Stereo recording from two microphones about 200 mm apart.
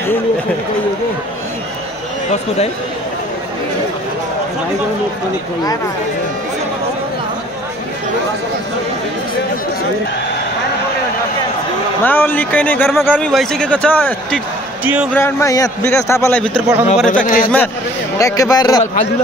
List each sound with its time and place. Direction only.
12.0 s a man's voice: 10° left (ahead or behind)
16.6 s speech: 5° right (ahead or behind)
17.1 s speech: 40° left (ahead or behind)
18.1 s a man's voice: 15° left (ahead or behind)